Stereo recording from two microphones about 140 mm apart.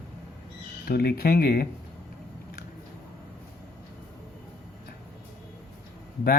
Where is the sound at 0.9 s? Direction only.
90° left.